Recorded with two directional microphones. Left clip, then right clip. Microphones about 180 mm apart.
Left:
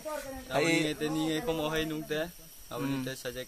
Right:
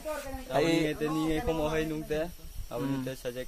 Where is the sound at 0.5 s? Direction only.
10° left (ahead or behind).